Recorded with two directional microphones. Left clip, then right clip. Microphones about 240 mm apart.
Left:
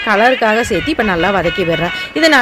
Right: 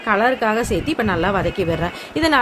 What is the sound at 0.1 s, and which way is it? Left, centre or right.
Speech, left.